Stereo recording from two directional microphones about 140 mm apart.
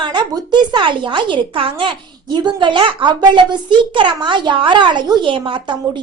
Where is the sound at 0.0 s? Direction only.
35° right (ahead or behind).